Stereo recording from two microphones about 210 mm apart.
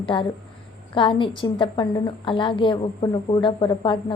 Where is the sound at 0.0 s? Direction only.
25° left (ahead or behind).